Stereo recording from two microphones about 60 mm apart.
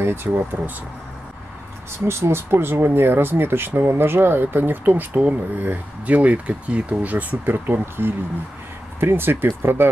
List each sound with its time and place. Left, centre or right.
0.0 s speech: right
2.0 s speech: right